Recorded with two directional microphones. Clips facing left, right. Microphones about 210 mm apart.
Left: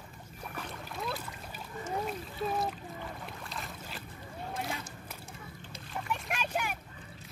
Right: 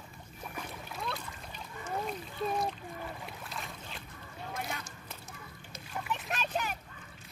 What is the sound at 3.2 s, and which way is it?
Boat, centre (ahead or behind).